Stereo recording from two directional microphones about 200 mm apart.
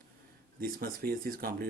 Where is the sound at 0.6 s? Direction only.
45° right (ahead or behind).